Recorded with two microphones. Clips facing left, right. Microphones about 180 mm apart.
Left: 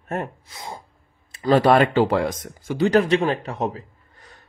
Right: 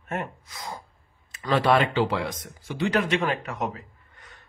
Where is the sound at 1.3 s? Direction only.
40° left (ahead or behind).